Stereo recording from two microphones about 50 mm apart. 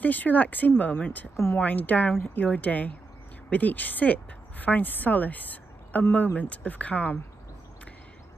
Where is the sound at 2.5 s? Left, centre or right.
Left.